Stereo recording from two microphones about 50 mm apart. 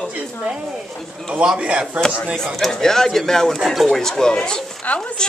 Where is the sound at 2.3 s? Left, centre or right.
Centre.